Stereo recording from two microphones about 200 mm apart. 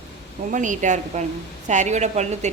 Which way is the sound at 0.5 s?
40° right (ahead or behind).